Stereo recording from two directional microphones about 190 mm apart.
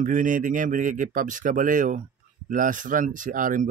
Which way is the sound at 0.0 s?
45° right (ahead or behind).